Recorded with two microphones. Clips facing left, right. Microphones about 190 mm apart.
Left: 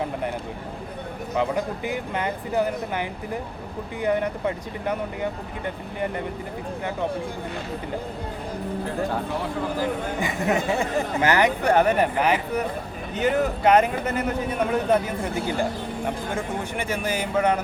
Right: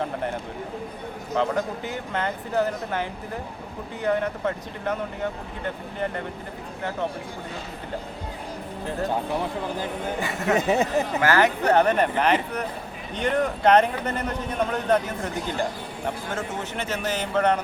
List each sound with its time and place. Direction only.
1.4 s a man's voice: 15° left (ahead or behind)
10.2 s a man's voice: 15° left (ahead or behind)
10.6 s speech: 20° right (ahead or behind)
11.2 s a man's voice: 15° left (ahead or behind)